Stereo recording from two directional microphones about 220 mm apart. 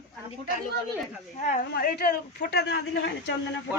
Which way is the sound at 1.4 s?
35° left (ahead or behind).